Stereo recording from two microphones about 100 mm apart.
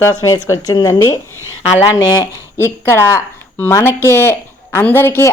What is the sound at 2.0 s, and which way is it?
Speech, 45° left (ahead or behind).